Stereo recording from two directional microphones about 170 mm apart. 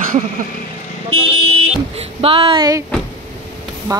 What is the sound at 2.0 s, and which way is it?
Speech, 30° right (ahead or behind).